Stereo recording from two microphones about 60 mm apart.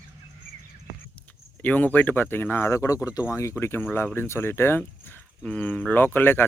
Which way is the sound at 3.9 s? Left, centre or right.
Left.